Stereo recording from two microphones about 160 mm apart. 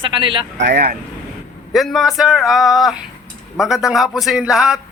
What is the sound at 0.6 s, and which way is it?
Speech, 75° right (ahead or behind).